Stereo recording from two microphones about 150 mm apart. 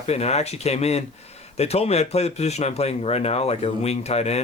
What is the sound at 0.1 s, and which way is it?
Speech, 45° left (ahead or behind).